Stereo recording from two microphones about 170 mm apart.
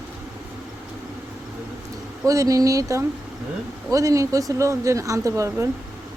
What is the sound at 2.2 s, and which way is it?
Speech, 20° right (ahead or behind).